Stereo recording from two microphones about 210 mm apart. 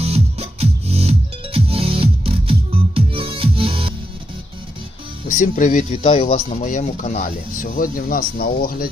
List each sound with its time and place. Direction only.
0.0 s music: 30° right (ahead or behind)
5.3 s speech: 40° left (ahead or behind)